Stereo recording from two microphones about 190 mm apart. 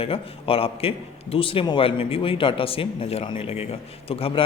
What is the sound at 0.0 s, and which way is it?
A man's voice, 30° left (ahead or behind).